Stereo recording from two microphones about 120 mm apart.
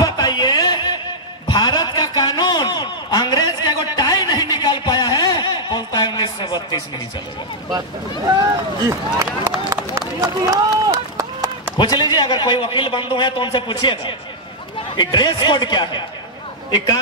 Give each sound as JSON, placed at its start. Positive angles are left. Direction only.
{"t": 0.0, "sound": "music", "side_deg": 35}
{"t": 1.5, "sound": "a sound", "side_deg": 35}
{"t": 8.8, "sound": "speech", "side_deg": -30}
{"t": 9.9, "sound": "run", "side_deg": -30}
{"t": 11.7, "sound": "a man's voice", "side_deg": 35}